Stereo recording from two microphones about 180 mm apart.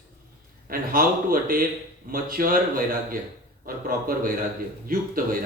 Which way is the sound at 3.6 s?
50° right (ahead or behind).